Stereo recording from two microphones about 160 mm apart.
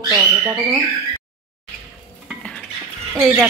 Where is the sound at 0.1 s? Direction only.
20° right (ahead or behind).